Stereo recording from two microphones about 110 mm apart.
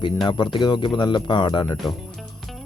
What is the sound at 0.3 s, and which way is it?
Speech, 45° left (ahead or behind).